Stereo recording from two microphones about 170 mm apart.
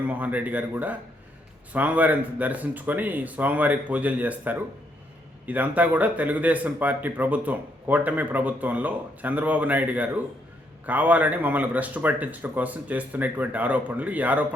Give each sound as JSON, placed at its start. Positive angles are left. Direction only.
{"t": 0.0, "sound": "speech", "side_deg": -10}